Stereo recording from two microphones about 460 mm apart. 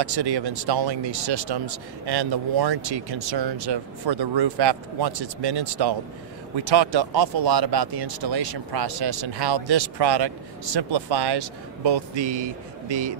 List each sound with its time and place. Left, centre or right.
0.0 s speech: right